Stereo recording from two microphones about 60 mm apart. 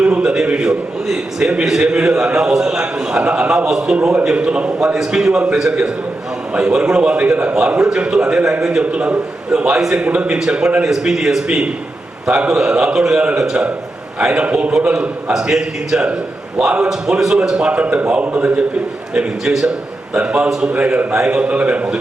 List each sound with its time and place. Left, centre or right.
0.0 s a sound: centre
1.0 s a man's voice: centre
4.9 s a man's voice: centre; by 7.5 s right
7.8 s a man's voice: centre
10.3 s a man's voice: centre